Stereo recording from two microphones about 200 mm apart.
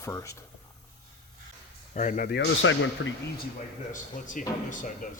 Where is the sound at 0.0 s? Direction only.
15° left (ahead or behind).